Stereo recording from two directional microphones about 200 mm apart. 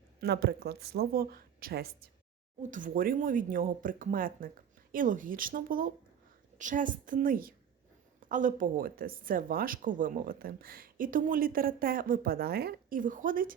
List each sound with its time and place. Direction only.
0.2 s a woman's voice: 55° right (ahead or behind)